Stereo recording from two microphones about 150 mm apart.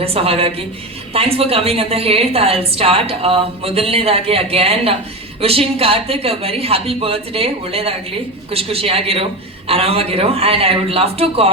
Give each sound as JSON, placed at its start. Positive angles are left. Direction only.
{"t": 0.0, "sound": "a woman's voice", "side_deg": -40}